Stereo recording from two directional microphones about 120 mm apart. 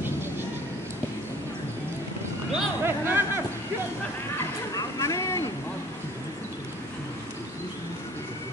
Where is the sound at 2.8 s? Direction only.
20° right (ahead or behind).